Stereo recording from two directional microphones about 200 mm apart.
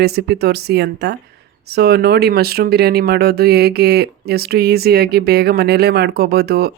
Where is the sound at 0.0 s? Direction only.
55° right (ahead or behind).